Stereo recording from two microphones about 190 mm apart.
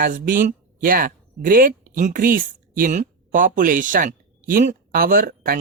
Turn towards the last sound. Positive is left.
turn(degrees=-50)  # may be behind; listen again after turning